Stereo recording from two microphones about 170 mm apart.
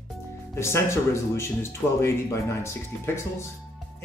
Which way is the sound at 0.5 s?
15° left (ahead or behind).